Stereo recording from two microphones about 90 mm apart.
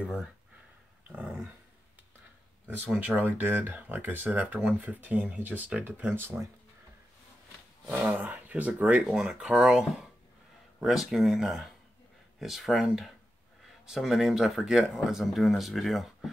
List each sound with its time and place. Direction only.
1.0 s dog: 15° right (ahead or behind)
2.9 s speech: 20° right (ahead or behind)
8.0 s speech: 15° right (ahead or behind)
9.0 s speech: 5° right (ahead or behind)